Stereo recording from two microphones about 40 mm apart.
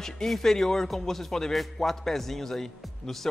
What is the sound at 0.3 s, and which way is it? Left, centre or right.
A man's voice, centre.